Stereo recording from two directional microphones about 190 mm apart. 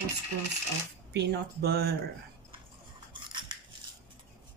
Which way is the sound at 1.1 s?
60° right (ahead or behind).